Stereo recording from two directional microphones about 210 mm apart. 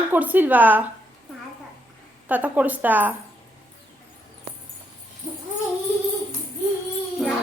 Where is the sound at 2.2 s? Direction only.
5° right (ahead or behind).